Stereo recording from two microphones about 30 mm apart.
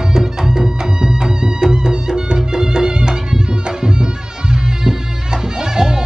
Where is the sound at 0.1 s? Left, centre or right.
Centre.